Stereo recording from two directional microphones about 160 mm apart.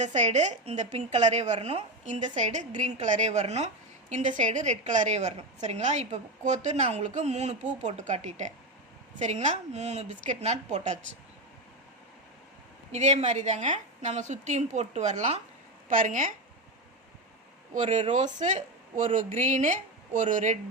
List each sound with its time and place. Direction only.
0.0 s a woman's voice: 45° right (ahead or behind)
12.9 s a woman's voice: 45° right (ahead or behind)
17.7 s a woman's voice: 45° right (ahead or behind)